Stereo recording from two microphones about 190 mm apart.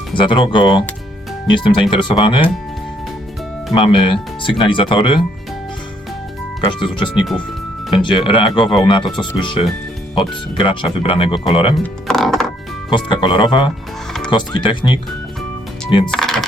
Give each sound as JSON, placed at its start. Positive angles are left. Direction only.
{"t": 0.2, "sound": "speech", "side_deg": 25}
{"t": 3.8, "sound": "speech", "side_deg": 25}
{"t": 6.6, "sound": "speech", "side_deg": 25}
{"t": 12.0, "sound": "music", "side_deg": 0}
{"t": 12.9, "sound": "speech", "side_deg": 25}
{"t": 16.0, "sound": "music", "side_deg": 0}